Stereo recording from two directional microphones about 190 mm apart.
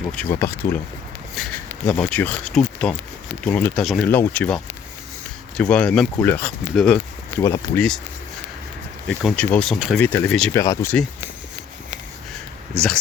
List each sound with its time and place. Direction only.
0.1 s speech: 10° left (ahead or behind)
1.9 s speech: 5° left (ahead or behind)
9.0 s speech: 5° left (ahead or behind)
10.5 s speech: 20° left (ahead or behind)
12.7 s speech: 5° left (ahead or behind)